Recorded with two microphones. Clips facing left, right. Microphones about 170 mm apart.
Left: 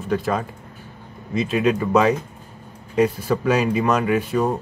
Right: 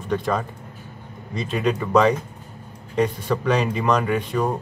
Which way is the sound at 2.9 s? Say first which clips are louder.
Left 3 dB; 5° left (ahead or behind).